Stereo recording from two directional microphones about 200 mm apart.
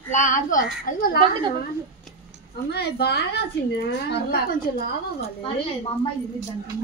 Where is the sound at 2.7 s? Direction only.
55° left (ahead or behind).